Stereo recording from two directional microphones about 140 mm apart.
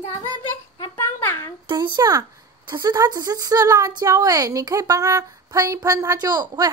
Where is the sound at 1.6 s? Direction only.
30° right (ahead or behind).